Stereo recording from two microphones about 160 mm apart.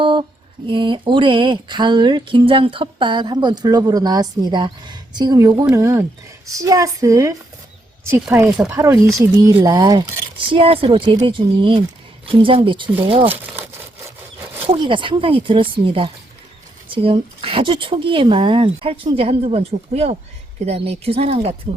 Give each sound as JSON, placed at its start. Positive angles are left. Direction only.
{"t": 0.0, "sound": "a sound", "side_deg": -30}
{"t": 0.7, "sound": "speech", "side_deg": -30}
{"t": 10.6, "sound": "speech", "side_deg": -35}
{"t": 13.2, "sound": "speech", "side_deg": -10}
{"t": 14.8, "sound": "speech", "side_deg": -30}